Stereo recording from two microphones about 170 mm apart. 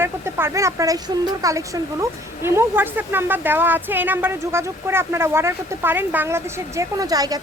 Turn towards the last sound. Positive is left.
turn(degrees=-20)  # may be behind; listen again after turning